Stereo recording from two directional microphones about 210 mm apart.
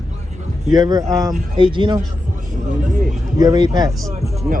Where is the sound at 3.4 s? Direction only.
20° right (ahead or behind).